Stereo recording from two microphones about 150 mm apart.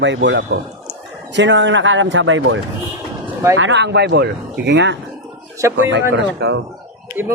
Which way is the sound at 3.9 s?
90° right.